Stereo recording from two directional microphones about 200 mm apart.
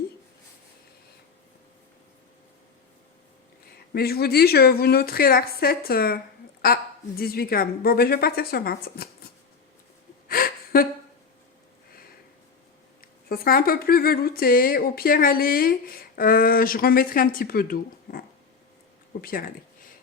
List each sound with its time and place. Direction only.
3.9 s speech: 50° left (ahead or behind)
10.2 s gasp: 45° left (ahead or behind)
13.0 s speech: 50° left (ahead or behind)
19.2 s speech: 45° left (ahead or behind)